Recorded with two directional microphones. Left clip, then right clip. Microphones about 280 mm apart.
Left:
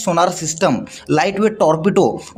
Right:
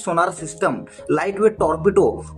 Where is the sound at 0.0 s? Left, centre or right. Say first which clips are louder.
Left 4 dB; left.